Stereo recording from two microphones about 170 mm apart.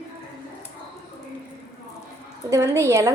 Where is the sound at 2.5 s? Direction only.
15° right (ahead or behind).